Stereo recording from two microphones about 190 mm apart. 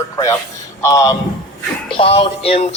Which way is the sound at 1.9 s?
30° left (ahead or behind).